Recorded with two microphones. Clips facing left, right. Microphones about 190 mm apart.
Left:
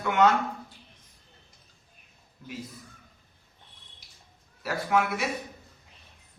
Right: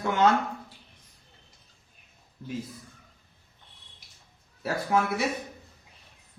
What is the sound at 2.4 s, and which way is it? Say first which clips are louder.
Speech: right 5 dB; 35° right (ahead or behind).